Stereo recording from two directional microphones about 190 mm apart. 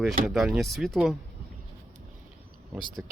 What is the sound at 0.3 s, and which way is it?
Speech, 5° right (ahead or behind).